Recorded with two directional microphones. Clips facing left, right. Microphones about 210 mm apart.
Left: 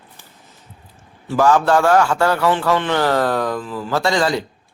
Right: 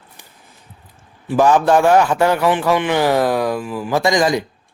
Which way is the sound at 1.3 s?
15° right (ahead or behind).